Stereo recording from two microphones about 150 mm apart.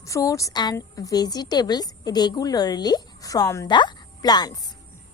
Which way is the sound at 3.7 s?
30° left (ahead or behind).